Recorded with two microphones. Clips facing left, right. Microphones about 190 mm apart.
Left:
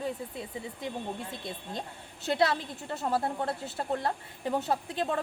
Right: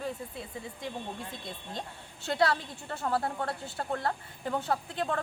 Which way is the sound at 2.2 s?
20° left (ahead or behind).